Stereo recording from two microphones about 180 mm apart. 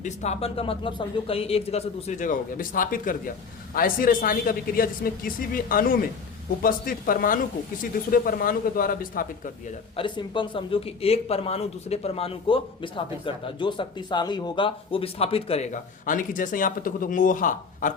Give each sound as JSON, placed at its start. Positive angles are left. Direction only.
{"t": 0.0, "sound": "a man's voice", "side_deg": 40}
{"t": 10.0, "sound": "speech", "side_deg": 25}